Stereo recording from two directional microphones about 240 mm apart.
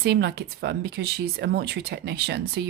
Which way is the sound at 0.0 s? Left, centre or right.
Right.